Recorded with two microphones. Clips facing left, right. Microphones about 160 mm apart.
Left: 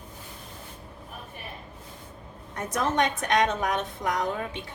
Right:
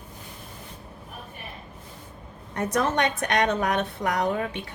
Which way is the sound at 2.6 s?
65° right (ahead or behind).